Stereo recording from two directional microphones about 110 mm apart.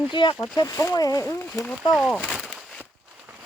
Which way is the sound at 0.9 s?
30° left (ahead or behind).